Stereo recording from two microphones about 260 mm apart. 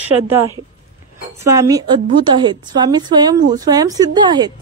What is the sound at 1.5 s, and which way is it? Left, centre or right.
A woman's voice, centre.